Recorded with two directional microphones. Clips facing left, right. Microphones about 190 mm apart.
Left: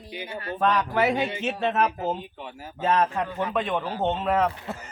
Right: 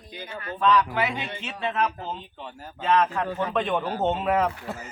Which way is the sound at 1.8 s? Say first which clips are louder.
Left 4 dB; 10° left (ahead or behind).